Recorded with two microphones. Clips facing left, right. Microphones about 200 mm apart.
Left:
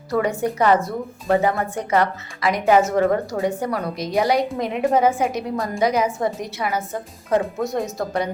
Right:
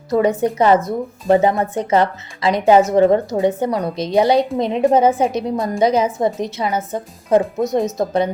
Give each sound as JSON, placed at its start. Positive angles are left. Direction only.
{"t": 0.1, "sound": "a woman's voice", "side_deg": -20}